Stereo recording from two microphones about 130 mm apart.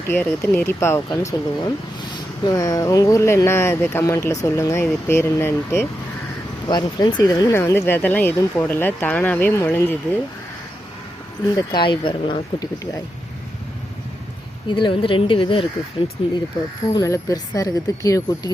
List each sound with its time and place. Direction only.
0.1 s speech: 15° left (ahead or behind)
6.7 s speech: 35° left (ahead or behind)
7.5 s speech: 20° left (ahead or behind)
11.7 s speech: 40° left (ahead or behind)
14.7 s speech: 40° left (ahead or behind)
16.9 s speech: 25° left (ahead or behind)